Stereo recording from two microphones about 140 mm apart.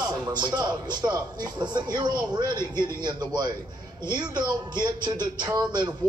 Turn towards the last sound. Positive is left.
turn(degrees=-30)  # may be behind; listen again after turning